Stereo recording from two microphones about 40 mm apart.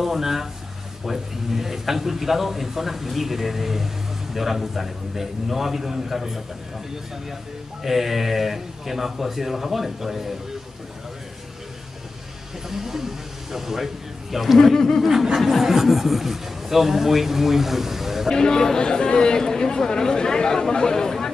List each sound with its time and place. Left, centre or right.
0.0 s a man's voice: centre
7.8 s a man's voice: centre
12.6 s a man's voice: centre
14.6 s speech: centre
15.0 s a man's voice: centre
18.3 s speech: centre